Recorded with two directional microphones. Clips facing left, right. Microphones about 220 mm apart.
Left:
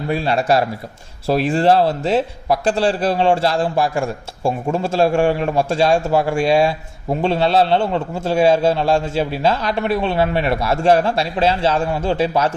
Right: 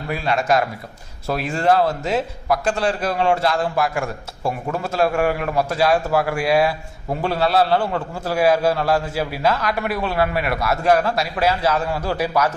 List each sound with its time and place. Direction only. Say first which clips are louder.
0.1 s a man's voice: left 2 dB; 30° left (ahead or behind)